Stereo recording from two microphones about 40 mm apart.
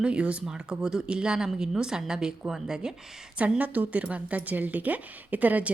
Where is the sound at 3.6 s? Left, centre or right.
Right.